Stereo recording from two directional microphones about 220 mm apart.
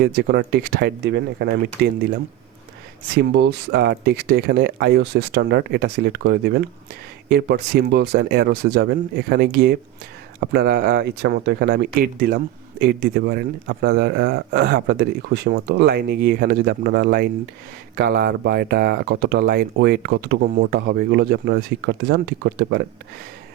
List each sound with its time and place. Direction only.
0.0 s speech: 45° right (ahead or behind)
3.2 s speech: 45° right (ahead or behind)